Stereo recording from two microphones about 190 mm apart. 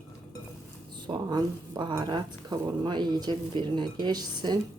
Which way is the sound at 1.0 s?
25° right (ahead or behind).